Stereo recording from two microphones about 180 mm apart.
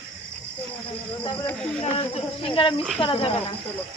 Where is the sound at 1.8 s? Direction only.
35° left (ahead or behind).